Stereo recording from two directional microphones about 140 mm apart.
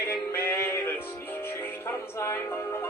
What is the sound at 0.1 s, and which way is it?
Music, 20° left (ahead or behind).